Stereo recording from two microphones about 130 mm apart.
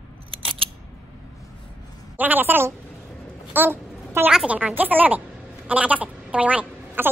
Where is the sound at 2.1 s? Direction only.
15° right (ahead or behind).